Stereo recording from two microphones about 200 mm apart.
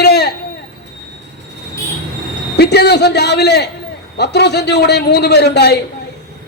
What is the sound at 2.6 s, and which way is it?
A man's voice, 55° left (ahead or behind).